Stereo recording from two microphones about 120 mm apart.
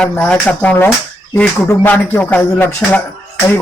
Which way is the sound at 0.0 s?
10° left (ahead or behind).